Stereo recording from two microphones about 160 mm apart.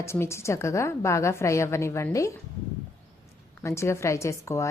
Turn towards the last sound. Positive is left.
turn(degrees=20)  # may be behind; listen again after turning